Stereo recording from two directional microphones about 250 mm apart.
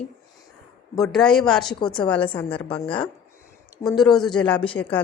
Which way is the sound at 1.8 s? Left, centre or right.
Centre.